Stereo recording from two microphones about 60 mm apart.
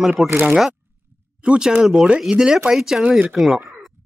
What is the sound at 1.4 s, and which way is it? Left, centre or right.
Speech, centre.